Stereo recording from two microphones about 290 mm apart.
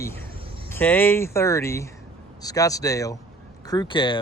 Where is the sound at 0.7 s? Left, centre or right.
Centre.